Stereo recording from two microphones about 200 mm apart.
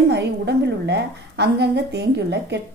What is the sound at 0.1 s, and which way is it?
A woman's voice, 60° right (ahead or behind).